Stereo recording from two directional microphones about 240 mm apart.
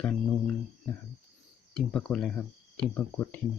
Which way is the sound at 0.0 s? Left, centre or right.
Centre.